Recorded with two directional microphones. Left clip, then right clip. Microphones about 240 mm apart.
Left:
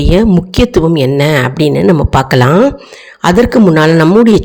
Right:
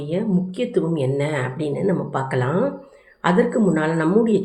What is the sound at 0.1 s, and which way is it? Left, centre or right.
Speech, left.